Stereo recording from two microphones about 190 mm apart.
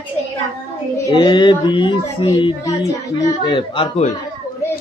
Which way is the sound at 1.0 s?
20° left (ahead or behind).